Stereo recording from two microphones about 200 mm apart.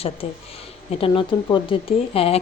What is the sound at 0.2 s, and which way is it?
A woman's voice, 30° left (ahead or behind).